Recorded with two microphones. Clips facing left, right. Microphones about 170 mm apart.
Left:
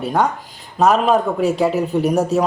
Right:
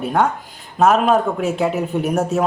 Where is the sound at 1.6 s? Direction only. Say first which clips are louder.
Left 1 dB; centre (ahead or behind).